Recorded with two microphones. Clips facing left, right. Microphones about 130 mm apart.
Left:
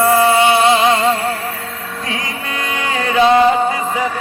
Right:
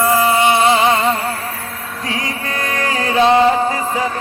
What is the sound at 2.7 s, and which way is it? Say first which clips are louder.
Music: left 1 dB; 35° right (ahead or behind).